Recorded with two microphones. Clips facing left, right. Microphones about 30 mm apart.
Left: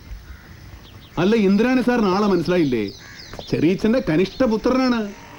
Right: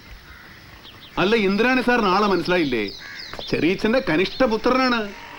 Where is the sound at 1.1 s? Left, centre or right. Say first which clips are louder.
Left 2 dB; right.